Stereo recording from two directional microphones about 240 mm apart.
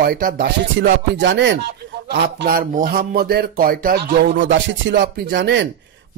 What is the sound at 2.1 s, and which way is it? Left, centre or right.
Speech, right.